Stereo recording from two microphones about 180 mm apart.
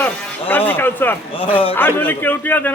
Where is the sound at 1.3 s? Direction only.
30° left (ahead or behind).